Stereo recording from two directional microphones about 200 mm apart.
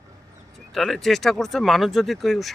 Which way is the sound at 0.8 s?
Centre (ahead or behind).